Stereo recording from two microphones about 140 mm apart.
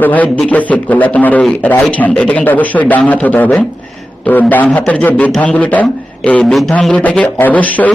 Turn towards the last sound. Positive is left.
turn(degrees=10)  # may be behind; listen again after turning